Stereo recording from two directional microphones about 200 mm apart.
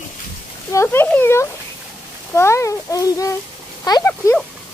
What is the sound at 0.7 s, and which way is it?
A child's voice, 15° left (ahead or behind).